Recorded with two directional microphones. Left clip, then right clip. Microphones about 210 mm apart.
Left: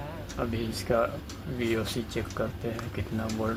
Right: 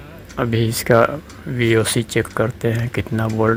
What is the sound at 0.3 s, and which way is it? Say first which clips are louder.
Speech: right 13 dB; 45° right (ahead or behind).